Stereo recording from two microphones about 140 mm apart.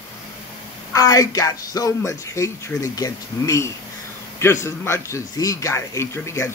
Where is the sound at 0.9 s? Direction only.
25° left (ahead or behind).